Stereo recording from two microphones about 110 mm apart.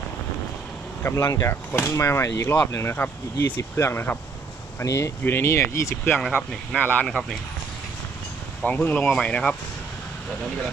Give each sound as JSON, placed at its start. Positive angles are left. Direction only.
{"t": 1.0, "sound": "speech", "side_deg": 25}
{"t": 7.1, "sound": "speech", "side_deg": 5}
{"t": 8.6, "sound": "speech", "side_deg": 15}